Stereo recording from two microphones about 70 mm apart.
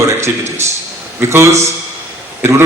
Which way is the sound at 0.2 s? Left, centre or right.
Right.